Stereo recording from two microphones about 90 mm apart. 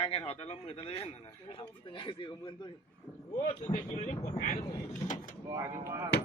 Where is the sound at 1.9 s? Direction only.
65° left (ahead or behind).